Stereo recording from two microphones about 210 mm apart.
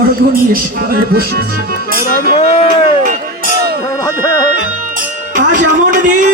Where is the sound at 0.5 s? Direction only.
45° right (ahead or behind).